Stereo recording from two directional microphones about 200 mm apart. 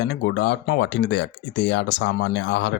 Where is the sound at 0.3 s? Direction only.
55° left (ahead or behind).